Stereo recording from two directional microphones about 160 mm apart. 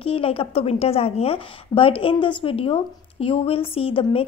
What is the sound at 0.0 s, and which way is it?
A woman's voice, 35° left (ahead or behind).